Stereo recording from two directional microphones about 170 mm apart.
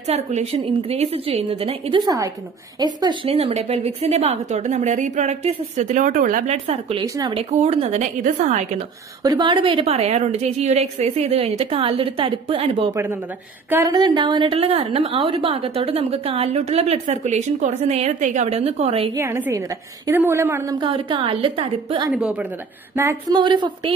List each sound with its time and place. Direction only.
0.0 s a woman's voice: 40° right (ahead or behind)
2.0 s a woman's voice: 20° right (ahead or behind); by 8.6 s 50° right (ahead or behind)
9.2 s a woman's voice: 25° right (ahead or behind)
12.9 s a woman's voice: 15° right (ahead or behind); by 19.1 s 35° right (ahead or behind)
19.1 s a woman's voice: 15° right (ahead or behind)
22.1 s a woman's voice: 10° right (ahead or behind)
22.9 s a woman's voice: 20° right (ahead or behind)